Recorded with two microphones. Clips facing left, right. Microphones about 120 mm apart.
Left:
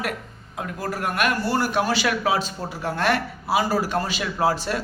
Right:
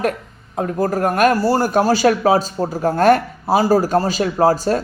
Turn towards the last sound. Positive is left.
turn(degrees=-40)  # may be behind; listen again after turning